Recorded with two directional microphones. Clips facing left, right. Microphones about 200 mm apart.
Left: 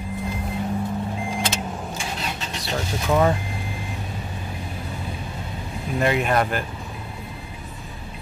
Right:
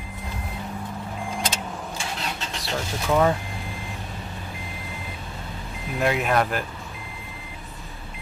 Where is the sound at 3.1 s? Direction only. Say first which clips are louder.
Left 1 dB; 5° left (ahead or behind).